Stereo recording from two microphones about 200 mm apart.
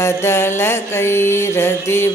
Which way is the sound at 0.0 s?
15° left (ahead or behind).